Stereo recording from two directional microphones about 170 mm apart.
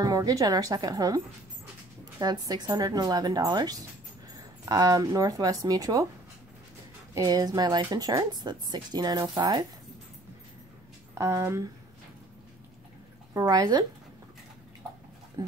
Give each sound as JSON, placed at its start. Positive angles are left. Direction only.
{"t": 0.0, "sound": "speech", "side_deg": -20}
{"t": 7.2, "sound": "speech", "side_deg": -20}
{"t": 11.1, "sound": "speech", "side_deg": -15}
{"t": 13.3, "sound": "speech", "side_deg": -20}
{"t": 15.4, "sound": "dog", "side_deg": -20}